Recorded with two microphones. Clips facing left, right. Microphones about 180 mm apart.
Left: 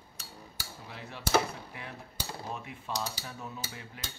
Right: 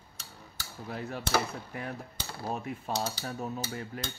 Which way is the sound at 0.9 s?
45° right (ahead or behind).